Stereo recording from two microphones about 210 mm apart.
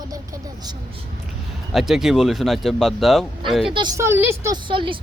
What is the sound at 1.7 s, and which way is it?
Speech, centre (ahead or behind).